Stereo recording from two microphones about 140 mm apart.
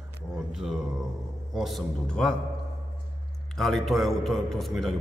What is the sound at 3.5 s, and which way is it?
A man's voice, centre (ahead or behind).